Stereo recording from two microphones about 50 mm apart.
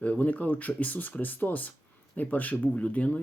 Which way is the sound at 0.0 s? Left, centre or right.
Left.